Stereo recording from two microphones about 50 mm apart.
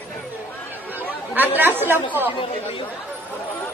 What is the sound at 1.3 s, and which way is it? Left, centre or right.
Speech, right.